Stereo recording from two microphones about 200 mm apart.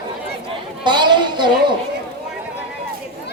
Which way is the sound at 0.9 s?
20° right (ahead or behind).